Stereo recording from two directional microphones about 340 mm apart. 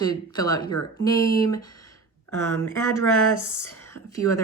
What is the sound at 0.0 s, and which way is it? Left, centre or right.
Speech, centre.